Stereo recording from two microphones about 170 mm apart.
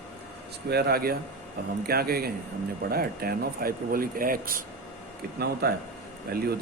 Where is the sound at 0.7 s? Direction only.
70° right (ahead or behind).